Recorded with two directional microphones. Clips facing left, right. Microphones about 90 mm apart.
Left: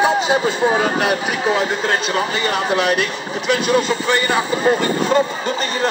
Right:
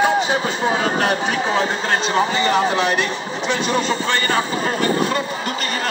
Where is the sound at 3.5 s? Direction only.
10° left (ahead or behind).